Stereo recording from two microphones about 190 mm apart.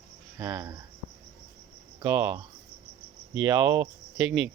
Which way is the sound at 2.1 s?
10° right (ahead or behind).